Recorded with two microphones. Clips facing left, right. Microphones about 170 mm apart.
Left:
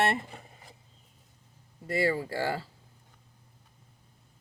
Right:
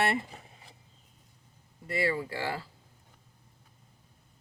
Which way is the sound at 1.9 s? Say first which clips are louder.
Left 2 dB; 40° left (ahead or behind).